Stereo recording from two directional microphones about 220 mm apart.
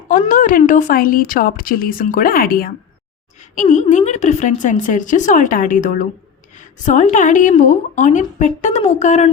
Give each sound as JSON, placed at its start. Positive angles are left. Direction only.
{"t": 0.1, "sound": "a woman's voice", "side_deg": 35}